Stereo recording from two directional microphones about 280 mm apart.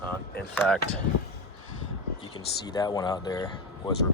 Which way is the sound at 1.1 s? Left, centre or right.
Left.